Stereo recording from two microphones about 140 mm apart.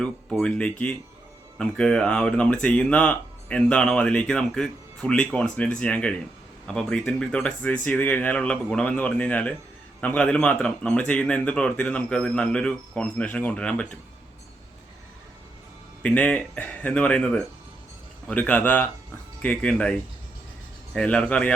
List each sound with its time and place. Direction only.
0.0 s speech: 5° left (ahead or behind)
16.0 s speech: 10° left (ahead or behind)